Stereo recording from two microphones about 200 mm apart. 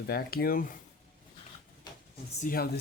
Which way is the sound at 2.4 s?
45° left (ahead or behind).